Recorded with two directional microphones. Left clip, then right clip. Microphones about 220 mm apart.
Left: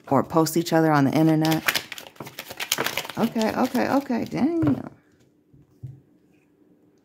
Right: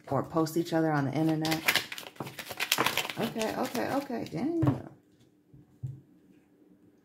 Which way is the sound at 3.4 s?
50° left (ahead or behind).